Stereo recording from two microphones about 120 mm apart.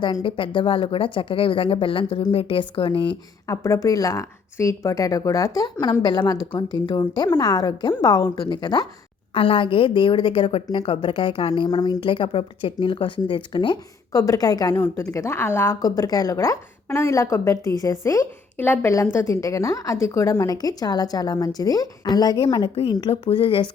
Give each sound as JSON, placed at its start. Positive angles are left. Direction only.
{"t": 0.0, "sound": "a woman's voice", "side_deg": 45}
{"t": 3.4, "sound": "a woman's voice", "side_deg": 25}
{"t": 9.3, "sound": "a woman's voice", "side_deg": 45}
{"t": 12.0, "sound": "a woman's voice", "side_deg": 45}
{"t": 15.8, "sound": "a woman's voice", "side_deg": 30}